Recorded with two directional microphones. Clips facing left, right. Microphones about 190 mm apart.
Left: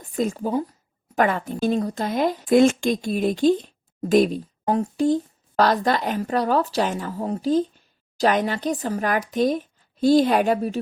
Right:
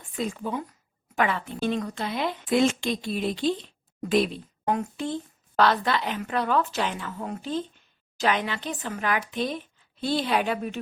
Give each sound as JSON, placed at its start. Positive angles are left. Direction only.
{"t": 0.0, "sound": "a woman's voice", "side_deg": 40}